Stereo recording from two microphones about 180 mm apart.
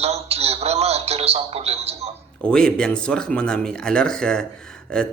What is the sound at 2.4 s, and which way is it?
Speech, 5° left (ahead or behind).